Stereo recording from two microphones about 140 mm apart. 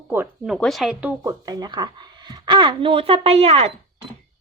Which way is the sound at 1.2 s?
25° right (ahead or behind).